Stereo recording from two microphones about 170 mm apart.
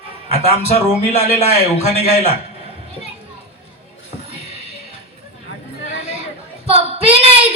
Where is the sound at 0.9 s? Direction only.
40° left (ahead or behind).